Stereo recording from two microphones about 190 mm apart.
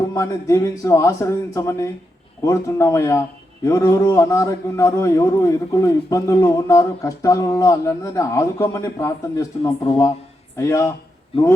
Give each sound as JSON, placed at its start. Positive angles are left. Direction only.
{"t": 0.0, "sound": "a man's voice", "side_deg": 15}